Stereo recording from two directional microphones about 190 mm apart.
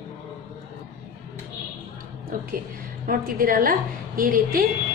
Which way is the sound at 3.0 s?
50° right (ahead or behind).